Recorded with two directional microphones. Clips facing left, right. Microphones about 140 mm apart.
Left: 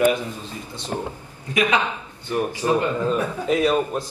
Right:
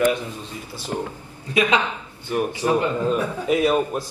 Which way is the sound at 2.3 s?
15° right (ahead or behind).